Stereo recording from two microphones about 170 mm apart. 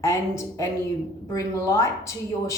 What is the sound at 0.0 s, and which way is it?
A woman's voice, 15° left (ahead or behind).